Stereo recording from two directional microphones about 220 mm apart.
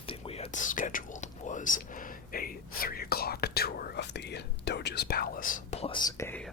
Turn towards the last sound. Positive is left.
turn(degrees=10)  # may be behind; listen again after turning